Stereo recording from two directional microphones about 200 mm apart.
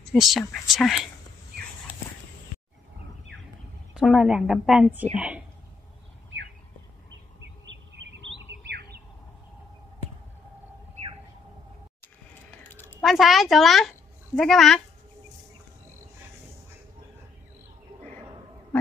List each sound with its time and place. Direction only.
0.1 s a woman's voice: centre (ahead or behind)
3.9 s a woman's voice: centre (ahead or behind)
7.9 s bird: 65° right (ahead or behind)
13.0 s a child's voice: centre (ahead or behind)